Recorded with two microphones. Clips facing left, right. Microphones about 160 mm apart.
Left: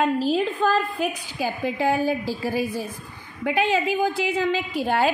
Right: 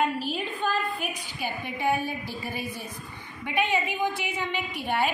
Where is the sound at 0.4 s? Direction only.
90° left.